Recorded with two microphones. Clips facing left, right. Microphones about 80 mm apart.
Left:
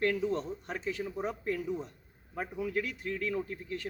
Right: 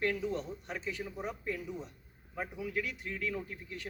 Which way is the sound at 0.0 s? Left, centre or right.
Left.